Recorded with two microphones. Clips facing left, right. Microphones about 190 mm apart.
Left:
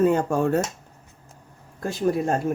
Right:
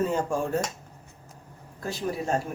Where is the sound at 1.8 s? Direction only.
50° left (ahead or behind).